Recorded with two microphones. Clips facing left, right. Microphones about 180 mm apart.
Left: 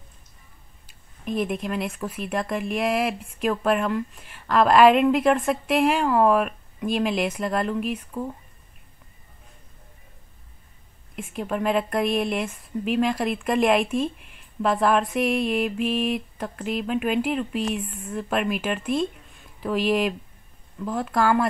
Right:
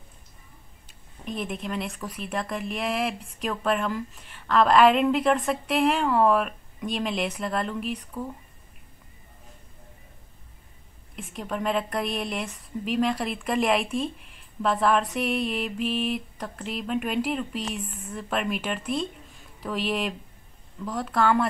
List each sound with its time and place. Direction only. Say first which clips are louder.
0.8 s a sound: left 5 dB; 5° left (ahead or behind)
2.0 s a woman's voice: left 4 dB; 5° left (ahead or behind)
11.1 s a woman's voice: left 4 dB; 5° left (ahead or behind)